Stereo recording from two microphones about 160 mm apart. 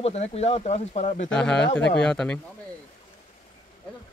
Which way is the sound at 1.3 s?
5° left (ahead or behind).